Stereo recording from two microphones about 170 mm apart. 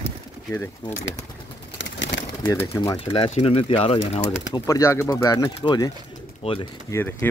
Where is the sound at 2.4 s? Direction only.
20° left (ahead or behind); by 4.3 s 35° left (ahead or behind).